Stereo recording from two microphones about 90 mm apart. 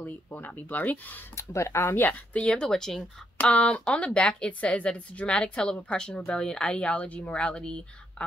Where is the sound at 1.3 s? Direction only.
30° left (ahead or behind).